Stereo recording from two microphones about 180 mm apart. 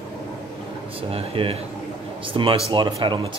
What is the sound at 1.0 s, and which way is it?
Speech, 30° right (ahead or behind).